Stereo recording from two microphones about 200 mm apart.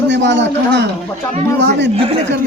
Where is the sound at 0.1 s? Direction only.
60° right (ahead or behind).